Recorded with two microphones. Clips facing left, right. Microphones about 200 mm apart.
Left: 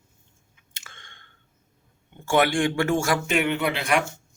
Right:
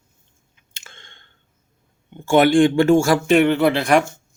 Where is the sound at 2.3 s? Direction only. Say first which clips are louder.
Right 8 dB; 25° right (ahead or behind).